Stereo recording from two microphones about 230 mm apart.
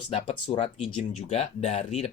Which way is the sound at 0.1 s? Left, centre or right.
Left.